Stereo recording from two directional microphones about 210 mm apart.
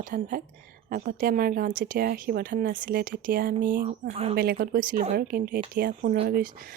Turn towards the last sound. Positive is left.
turn(degrees=-45)  # may be behind; listen again after turning